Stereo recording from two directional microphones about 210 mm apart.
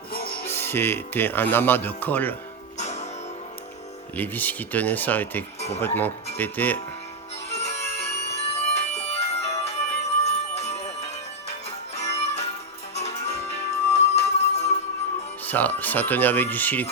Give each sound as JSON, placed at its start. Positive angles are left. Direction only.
{"t": 0.4, "sound": "speech", "side_deg": 10}
{"t": 2.7, "sound": "music", "side_deg": 35}
{"t": 4.2, "sound": "speech", "side_deg": 10}
{"t": 5.5, "sound": "speech", "side_deg": 30}
{"t": 5.8, "sound": "speech", "side_deg": 10}
{"t": 7.5, "sound": "music", "side_deg": 30}
{"t": 15.4, "sound": "speech", "side_deg": 10}